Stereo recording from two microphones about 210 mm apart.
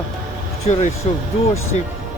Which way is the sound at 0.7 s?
35° left (ahead or behind).